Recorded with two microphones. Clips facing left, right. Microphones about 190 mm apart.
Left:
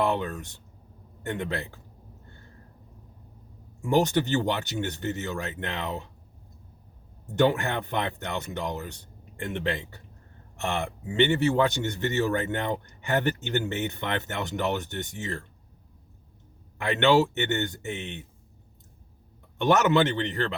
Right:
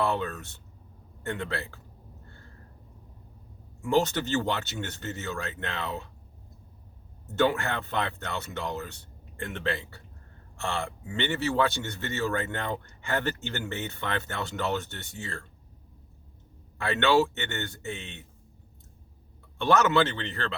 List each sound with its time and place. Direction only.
0.0 s speech: 15° left (ahead or behind)
3.8 s speech: 15° left (ahead or behind)
7.3 s speech: 15° left (ahead or behind)
16.7 s speech: 20° left (ahead or behind)
19.5 s speech: 20° left (ahead or behind)